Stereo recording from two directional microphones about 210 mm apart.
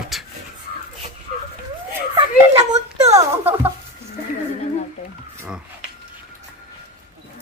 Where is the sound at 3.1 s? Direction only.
10° right (ahead or behind).